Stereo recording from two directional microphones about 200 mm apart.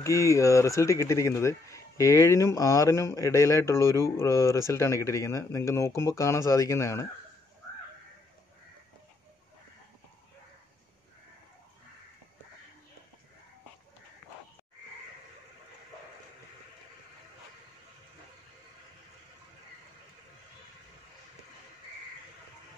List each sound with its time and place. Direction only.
0.0 s speech: 15° left (ahead or behind)